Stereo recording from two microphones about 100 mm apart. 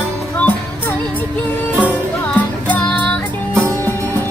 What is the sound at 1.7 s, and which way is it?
Music, 15° right (ahead or behind).